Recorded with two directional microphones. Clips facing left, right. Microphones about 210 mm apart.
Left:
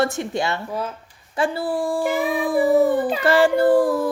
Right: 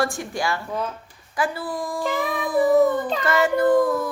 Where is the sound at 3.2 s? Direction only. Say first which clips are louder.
Left 3 dB; 30° left (ahead or behind).